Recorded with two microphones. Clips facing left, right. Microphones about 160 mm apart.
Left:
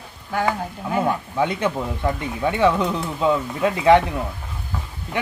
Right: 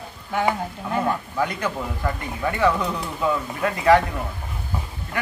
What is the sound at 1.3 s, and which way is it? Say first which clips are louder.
Speech: left 3 dB; 20° left (ahead or behind).